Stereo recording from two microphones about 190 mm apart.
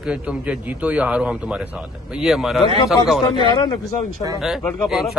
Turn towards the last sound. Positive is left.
turn(degrees=0)  # may be behind; listen again after turning